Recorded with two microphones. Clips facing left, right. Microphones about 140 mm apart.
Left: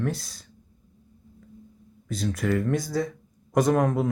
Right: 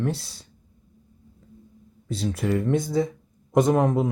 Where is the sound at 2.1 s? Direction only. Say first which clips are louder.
Right 1 dB; 30° right (ahead or behind).